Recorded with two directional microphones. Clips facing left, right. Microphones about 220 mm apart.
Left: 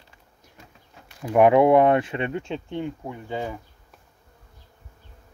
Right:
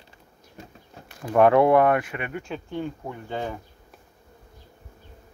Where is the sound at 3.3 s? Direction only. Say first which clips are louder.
Left 1 dB; 10° left (ahead or behind).